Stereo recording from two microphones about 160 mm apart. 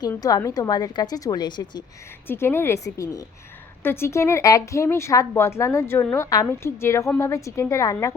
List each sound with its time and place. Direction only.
0.1 s a woman's voice: 25° left (ahead or behind)
2.2 s a woman's voice: 15° left (ahead or behind)